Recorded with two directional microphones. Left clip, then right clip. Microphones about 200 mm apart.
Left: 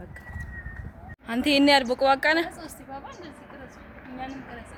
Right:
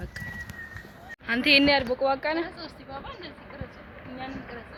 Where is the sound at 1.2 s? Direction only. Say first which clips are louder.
Right 1 dB; 15° left (ahead or behind).